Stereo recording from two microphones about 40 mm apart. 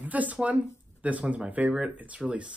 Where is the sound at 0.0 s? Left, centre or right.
Right.